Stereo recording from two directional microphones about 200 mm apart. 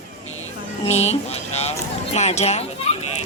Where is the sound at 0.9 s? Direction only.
35° left (ahead or behind).